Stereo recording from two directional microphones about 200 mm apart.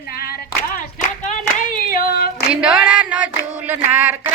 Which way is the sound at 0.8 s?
40° left (ahead or behind).